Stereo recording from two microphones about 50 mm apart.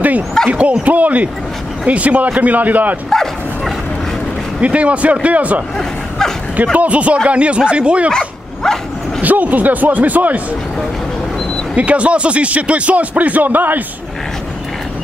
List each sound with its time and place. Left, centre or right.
0.5 s speech: right
3.1 s dog: centre
4.6 s speech: right
5.8 s a sound: centre
6.8 s speech: right
8.1 s dog: centre
9.2 s speech: right
11.7 s speech: right